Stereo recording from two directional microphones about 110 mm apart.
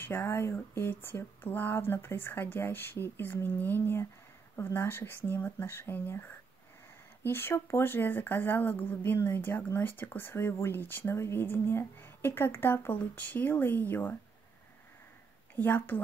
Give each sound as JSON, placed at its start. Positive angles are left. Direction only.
{"t": 0.0, "sound": "speech", "side_deg": 20}
{"t": 7.2, "sound": "speech", "side_deg": 20}
{"t": 15.5, "sound": "a woman's voice", "side_deg": 20}